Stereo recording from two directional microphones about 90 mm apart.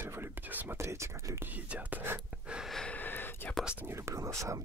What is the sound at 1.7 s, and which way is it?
Speech, 20° right (ahead or behind).